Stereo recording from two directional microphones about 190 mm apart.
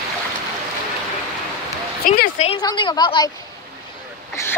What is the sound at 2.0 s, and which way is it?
Speech, 50° left (ahead or behind).